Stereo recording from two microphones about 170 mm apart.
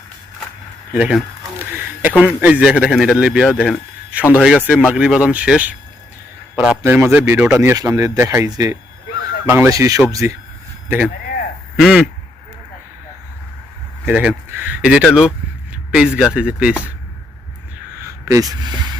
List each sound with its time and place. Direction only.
0.9 s speech: 5° right (ahead or behind)
6.8 s speech: 10° right (ahead or behind)
14.0 s speech: 5° right (ahead or behind)
17.9 s a sound: 15° right (ahead or behind)